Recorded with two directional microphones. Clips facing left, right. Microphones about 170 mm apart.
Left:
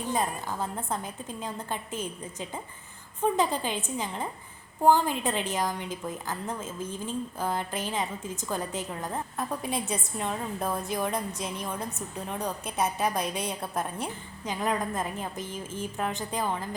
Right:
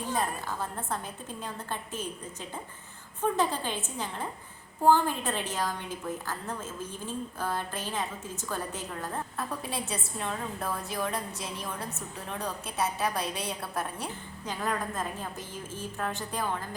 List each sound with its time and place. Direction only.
0.1 s a woman's voice: 15° left (ahead or behind)
3.2 s a woman's voice: 15° left (ahead or behind)